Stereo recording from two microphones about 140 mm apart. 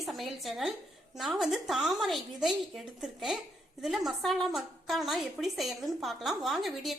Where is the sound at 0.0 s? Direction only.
Centre (ahead or behind).